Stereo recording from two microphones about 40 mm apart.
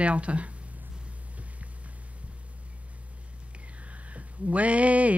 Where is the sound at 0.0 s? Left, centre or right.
Right.